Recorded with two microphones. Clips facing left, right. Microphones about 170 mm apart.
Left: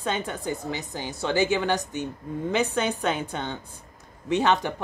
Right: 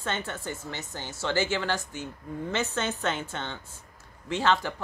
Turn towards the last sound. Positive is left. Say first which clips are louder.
# left 3 dB
turn(degrees=20)  # may be behind; listen again after turning